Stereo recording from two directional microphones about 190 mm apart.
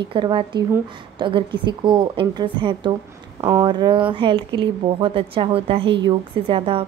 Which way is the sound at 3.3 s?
15° right (ahead or behind).